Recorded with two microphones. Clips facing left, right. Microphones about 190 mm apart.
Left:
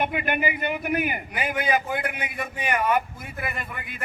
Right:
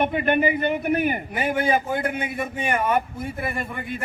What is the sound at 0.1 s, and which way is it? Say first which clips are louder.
A man's voice: right 6 dB; 30° right (ahead or behind).